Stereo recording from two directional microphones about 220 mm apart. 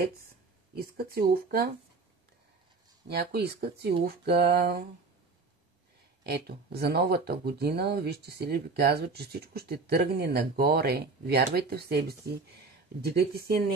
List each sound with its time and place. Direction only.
0.7 s speech: 45° right (ahead or behind)
3.1 s speech: 50° right (ahead or behind)
6.2 s speech: 45° right (ahead or behind)